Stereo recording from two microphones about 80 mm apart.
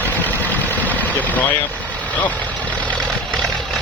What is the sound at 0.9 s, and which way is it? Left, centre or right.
Vehicle, left.